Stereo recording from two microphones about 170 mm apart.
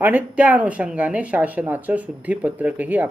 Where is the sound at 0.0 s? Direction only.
10° right (ahead or behind).